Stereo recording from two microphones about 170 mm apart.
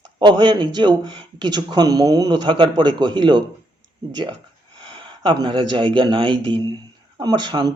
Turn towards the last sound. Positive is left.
turn(degrees=-25)  # may be behind; listen again after turning